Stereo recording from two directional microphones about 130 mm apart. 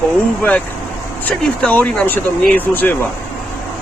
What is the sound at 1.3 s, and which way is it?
Speech, 10° left (ahead or behind).